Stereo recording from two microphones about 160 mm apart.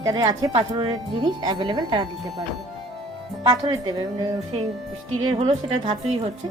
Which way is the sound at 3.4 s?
25° right (ahead or behind).